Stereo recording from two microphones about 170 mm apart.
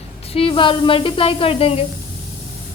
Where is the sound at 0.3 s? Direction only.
35° left (ahead or behind).